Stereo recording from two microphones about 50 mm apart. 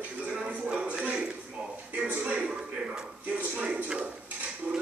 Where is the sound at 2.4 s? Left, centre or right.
Centre.